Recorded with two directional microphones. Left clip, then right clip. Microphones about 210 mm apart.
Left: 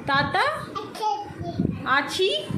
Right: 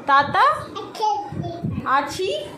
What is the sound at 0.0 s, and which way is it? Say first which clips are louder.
Speech: right 6 dB; 20° left (ahead or behind).